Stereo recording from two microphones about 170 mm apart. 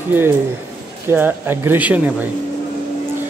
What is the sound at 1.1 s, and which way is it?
Speech, 10° right (ahead or behind).